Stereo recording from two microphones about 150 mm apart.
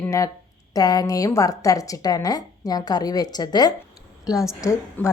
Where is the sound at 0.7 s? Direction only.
25° left (ahead or behind).